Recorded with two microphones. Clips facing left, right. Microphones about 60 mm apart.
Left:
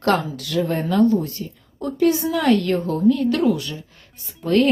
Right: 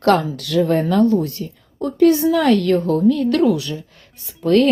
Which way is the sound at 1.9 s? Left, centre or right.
Right.